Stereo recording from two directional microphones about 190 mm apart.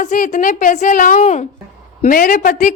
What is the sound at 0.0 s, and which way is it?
A woman's voice, 40° left (ahead or behind).